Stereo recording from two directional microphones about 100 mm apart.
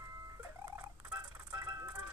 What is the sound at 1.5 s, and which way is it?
Music, 30° right (ahead or behind).